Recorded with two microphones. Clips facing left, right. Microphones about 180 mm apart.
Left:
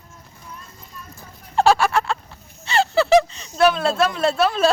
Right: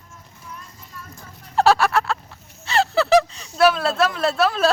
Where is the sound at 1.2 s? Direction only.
Centre (ahead or behind).